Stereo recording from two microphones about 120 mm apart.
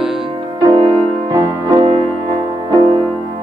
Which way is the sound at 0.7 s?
35° right (ahead or behind).